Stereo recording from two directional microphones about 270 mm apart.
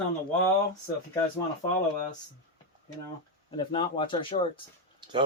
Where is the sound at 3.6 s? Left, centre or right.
Centre.